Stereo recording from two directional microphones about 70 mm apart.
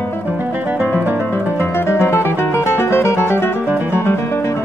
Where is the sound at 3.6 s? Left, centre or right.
Right.